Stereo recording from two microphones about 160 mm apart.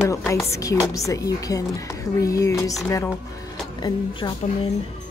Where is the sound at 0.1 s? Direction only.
20° left (ahead or behind).